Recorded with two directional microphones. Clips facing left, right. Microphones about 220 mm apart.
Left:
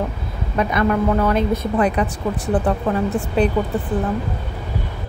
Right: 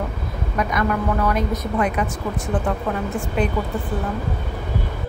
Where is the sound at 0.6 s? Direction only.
30° left (ahead or behind).